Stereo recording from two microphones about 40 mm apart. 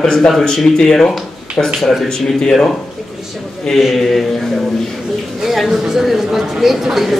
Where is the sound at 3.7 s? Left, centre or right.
Centre.